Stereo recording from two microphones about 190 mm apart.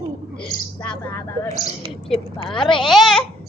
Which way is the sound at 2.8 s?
Centre (ahead or behind).